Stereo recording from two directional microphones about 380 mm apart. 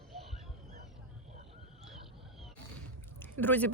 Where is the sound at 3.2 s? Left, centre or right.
Centre.